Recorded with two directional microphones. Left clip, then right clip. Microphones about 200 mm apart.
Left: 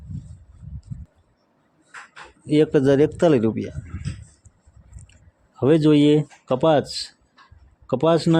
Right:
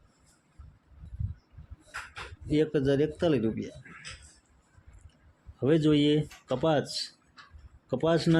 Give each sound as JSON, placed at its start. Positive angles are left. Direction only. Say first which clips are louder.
{"t": 2.5, "sound": "speech", "louder": "left 9 dB", "side_deg": 40}
{"t": 5.5, "sound": "speech", "louder": "left 8 dB", "side_deg": 35}